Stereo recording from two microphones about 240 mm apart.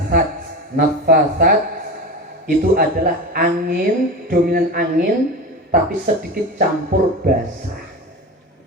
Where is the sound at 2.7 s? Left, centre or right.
Right.